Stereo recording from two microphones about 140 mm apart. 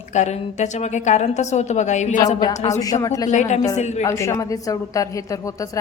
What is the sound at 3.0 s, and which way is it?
Speech, 25° left (ahead or behind).